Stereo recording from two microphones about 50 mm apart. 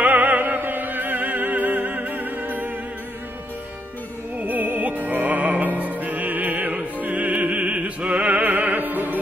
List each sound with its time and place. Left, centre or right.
0.0 s music: right
0.6 s music: right
4.4 s music: right